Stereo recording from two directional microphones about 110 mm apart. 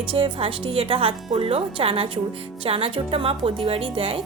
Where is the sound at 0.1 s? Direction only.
55° right (ahead or behind).